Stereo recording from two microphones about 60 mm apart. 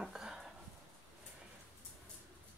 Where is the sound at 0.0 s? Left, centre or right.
Centre.